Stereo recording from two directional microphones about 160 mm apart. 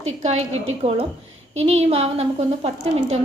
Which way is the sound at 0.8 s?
40° right (ahead or behind).